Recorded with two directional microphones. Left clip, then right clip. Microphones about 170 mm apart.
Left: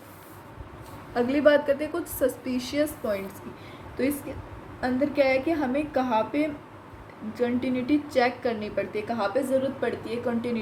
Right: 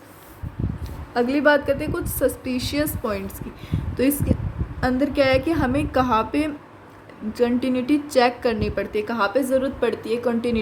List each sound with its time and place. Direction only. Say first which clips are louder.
1.1 s a woman's voice: right 3 dB; 35° right (ahead or behind)
4.8 s a woman's voice: right 4 dB; 65° right (ahead or behind)